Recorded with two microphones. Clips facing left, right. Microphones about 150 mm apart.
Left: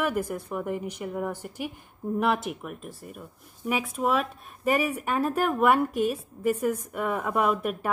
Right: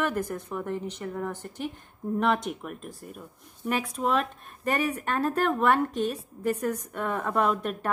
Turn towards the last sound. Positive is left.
turn(degrees=10)  # may be behind; listen again after turning